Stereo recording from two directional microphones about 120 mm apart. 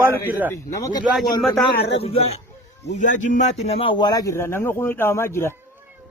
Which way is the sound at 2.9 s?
90° left.